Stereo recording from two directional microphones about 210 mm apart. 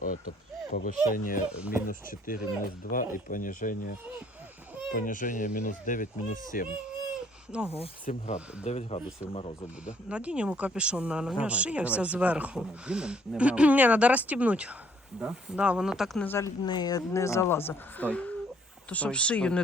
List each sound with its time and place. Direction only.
0.0 s speech: 45° left (ahead or behind)
1.5 s speech: 5° right (ahead or behind)
1.9 s speech: 40° left (ahead or behind)
4.9 s speech: 40° left (ahead or behind)
7.1 s a sound: 5° right (ahead or behind)
7.8 s speech: 35° left (ahead or behind)
10.1 s speech: 5° right (ahead or behind)
16.2 s speech: 10° left (ahead or behind)